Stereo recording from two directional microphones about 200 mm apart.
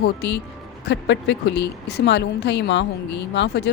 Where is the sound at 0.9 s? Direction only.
60° left (ahead or behind).